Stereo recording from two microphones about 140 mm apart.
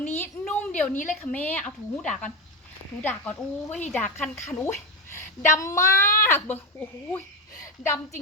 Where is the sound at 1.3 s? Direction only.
10° left (ahead or behind).